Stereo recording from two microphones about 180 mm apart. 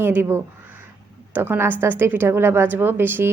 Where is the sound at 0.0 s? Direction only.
10° right (ahead or behind).